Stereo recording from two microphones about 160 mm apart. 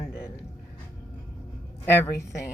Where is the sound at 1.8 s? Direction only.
15° left (ahead or behind).